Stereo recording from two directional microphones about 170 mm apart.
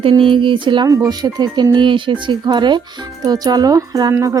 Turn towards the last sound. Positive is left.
turn(degrees=-20)  # may be behind; listen again after turning